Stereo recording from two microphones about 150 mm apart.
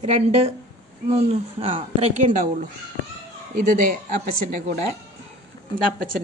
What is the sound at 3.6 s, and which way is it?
Speech, 60° right (ahead or behind).